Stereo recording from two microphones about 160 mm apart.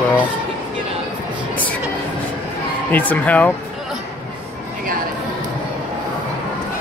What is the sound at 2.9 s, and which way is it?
Speech, 10° left (ahead or behind).